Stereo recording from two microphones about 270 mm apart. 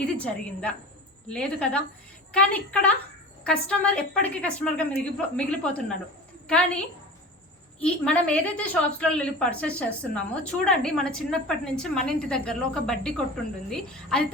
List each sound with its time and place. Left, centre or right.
0.0 s a woman's voice: centre